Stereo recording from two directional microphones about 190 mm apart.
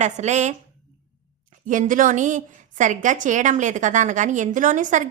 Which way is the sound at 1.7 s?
45° right (ahead or behind).